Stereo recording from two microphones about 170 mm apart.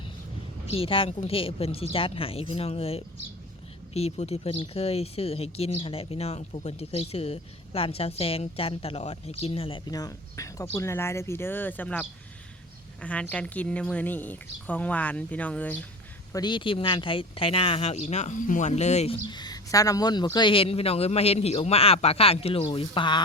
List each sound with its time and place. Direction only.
0.7 s a woman's voice: 35° left (ahead or behind); by 15.9 s 10° left (ahead or behind)
16.3 s speech: 25° left (ahead or behind)